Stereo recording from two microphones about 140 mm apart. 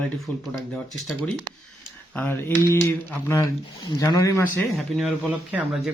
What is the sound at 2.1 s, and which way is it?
Speech, 15° left (ahead or behind).